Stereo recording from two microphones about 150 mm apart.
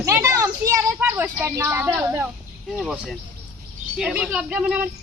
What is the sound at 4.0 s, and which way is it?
Speech, 5° right (ahead or behind).